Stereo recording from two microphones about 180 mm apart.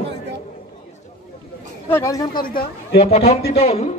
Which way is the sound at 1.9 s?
15° left (ahead or behind).